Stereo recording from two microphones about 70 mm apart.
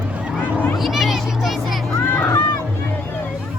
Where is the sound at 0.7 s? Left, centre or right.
Centre.